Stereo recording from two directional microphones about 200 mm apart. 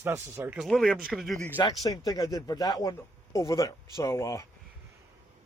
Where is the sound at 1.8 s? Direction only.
20° left (ahead or behind).